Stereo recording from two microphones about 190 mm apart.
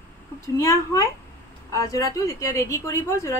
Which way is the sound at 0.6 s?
15° left (ahead or behind).